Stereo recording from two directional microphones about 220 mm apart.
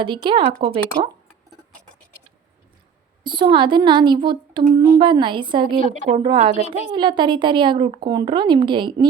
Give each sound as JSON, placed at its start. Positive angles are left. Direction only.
{"t": 0.0, "sound": "speech", "side_deg": -20}
{"t": 3.2, "sound": "speech", "side_deg": -20}